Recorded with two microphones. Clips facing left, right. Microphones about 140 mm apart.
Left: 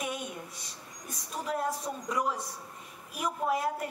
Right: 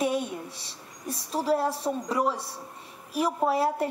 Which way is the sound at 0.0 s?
30° right (ahead or behind).